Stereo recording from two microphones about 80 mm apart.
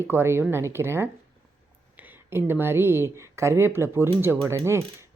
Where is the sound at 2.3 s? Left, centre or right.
Right.